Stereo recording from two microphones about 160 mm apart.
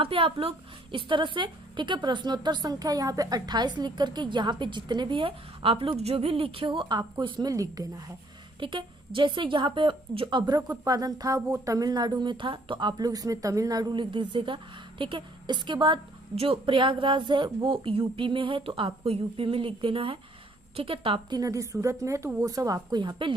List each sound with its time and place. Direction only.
0.0 s a woman's voice: 35° right (ahead or behind)